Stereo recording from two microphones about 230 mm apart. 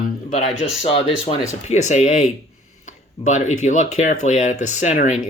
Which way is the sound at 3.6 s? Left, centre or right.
Left.